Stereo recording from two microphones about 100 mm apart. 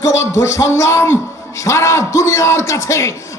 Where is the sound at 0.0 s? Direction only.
30° left (ahead or behind).